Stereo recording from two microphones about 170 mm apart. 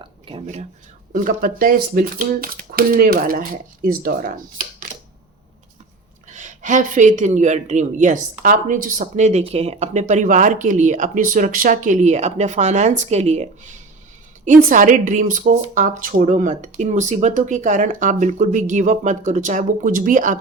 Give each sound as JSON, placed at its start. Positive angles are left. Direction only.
{"t": 0.3, "sound": "a sound", "side_deg": -30}
{"t": 1.1, "sound": "speech", "side_deg": -50}
{"t": 6.2, "sound": "speech", "side_deg": -45}